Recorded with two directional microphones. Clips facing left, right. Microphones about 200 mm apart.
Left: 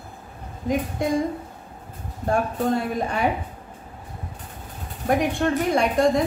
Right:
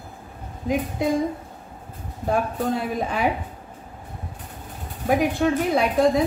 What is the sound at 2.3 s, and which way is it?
A woman's voice, centre (ahead or behind).